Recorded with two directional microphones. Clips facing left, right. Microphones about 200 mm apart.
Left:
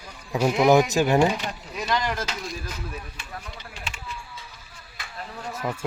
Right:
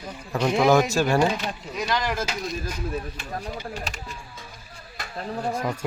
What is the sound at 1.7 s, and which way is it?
Speech, centre (ahead or behind).